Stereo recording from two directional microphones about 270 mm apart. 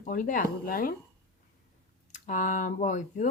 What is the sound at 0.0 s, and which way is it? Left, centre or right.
Speech, left.